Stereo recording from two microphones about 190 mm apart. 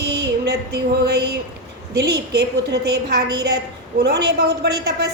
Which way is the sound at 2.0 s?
60° right (ahead or behind).